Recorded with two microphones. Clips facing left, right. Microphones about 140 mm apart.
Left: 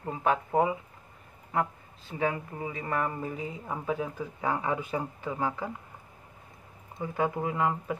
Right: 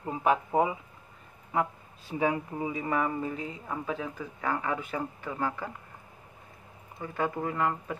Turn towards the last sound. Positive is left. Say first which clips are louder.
# left 1 dB
turn(degrees=15)  # may be behind; listen again after turning